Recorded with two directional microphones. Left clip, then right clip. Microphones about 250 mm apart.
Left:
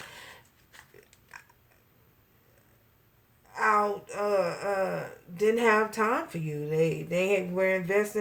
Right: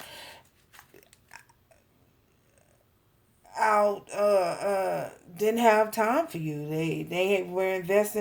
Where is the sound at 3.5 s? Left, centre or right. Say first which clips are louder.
Right 2 dB; right.